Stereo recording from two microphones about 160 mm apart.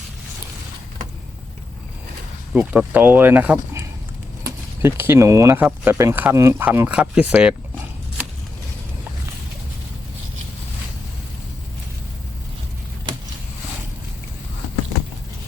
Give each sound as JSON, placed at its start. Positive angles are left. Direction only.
{"t": 2.5, "sound": "speech", "side_deg": -10}